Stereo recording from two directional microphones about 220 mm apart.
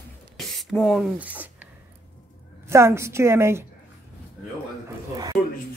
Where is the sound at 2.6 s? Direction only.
10° right (ahead or behind).